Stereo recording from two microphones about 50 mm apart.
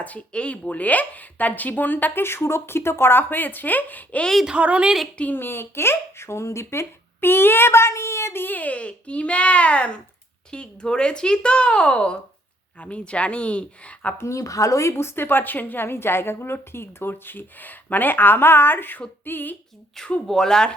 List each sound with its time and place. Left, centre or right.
0.0 s speech: left
2.2 s speech: left
4.4 s a woman's voice: right
5.3 s speech: left
14.2 s speech: left
20.2 s speech: centre